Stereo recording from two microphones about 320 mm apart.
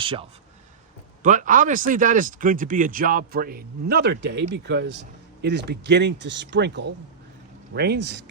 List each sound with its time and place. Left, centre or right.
0.0 s a man's voice: centre; by 8.2 s right